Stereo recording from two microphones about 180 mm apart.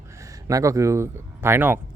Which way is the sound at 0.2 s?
15° right (ahead or behind).